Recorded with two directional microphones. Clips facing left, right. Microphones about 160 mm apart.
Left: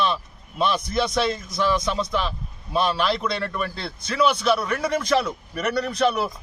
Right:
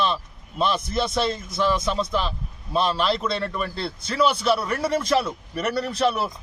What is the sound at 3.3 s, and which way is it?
Speech, 30° right (ahead or behind).